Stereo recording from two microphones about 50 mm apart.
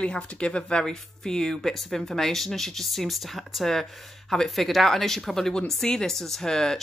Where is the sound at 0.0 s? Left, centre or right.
Left.